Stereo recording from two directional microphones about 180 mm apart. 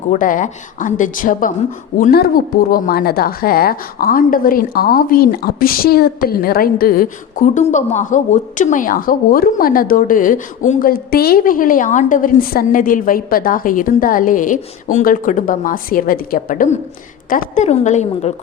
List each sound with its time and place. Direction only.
0.1 s a woman's voice: 45° left (ahead or behind)